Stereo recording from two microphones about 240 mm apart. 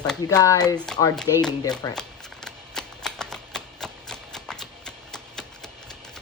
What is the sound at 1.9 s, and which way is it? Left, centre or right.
Shuffling cards, centre.